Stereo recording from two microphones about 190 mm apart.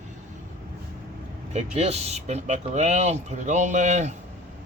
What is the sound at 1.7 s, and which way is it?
Speech, 35° right (ahead or behind).